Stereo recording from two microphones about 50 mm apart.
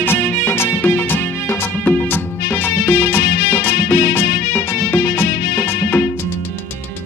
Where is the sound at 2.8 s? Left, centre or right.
Left.